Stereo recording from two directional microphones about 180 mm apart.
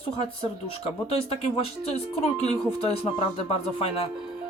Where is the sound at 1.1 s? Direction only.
35° left (ahead or behind).